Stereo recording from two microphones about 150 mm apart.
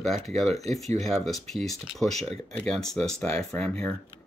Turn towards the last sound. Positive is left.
turn(degrees=5)  # may be behind; listen again after turning